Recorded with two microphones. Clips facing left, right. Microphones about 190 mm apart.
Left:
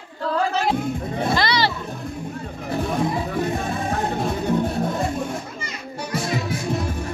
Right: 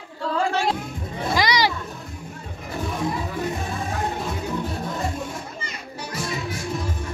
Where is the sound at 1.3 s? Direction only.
15° right (ahead or behind).